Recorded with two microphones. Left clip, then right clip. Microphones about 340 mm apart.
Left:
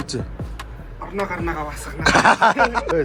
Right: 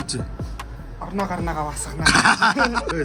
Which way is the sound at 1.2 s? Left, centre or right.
Centre.